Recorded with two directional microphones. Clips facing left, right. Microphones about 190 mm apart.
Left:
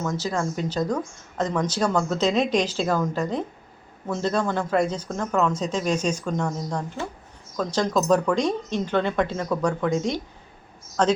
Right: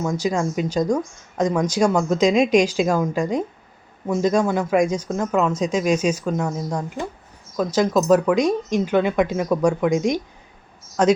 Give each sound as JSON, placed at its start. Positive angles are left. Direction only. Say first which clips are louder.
{"t": 0.0, "sound": "speech", "louder": "right 4 dB", "side_deg": -15}